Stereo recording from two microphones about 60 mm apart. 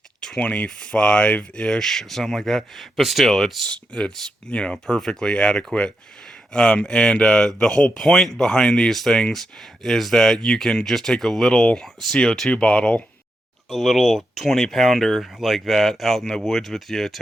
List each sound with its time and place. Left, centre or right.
0.2 s speech: centre
3.7 s speech: centre
13.7 s speech: centre